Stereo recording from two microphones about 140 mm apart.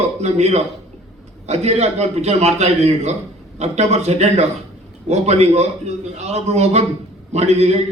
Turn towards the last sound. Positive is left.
turn(degrees=-50)  # may be behind; listen again after turning